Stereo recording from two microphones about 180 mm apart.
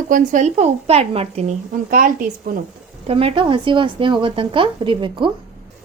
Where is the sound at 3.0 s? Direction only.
30° right (ahead or behind).